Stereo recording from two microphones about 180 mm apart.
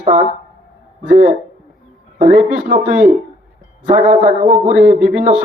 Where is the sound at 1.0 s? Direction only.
45° right (ahead or behind).